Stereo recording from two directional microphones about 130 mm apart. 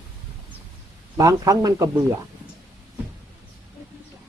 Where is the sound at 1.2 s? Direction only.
25° right (ahead or behind).